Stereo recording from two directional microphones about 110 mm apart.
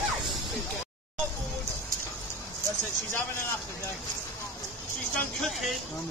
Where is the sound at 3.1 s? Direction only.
20° left (ahead or behind).